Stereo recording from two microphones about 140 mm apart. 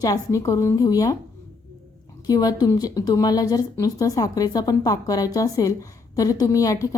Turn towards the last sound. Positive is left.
turn(degrees=25)  # may be behind; listen again after turning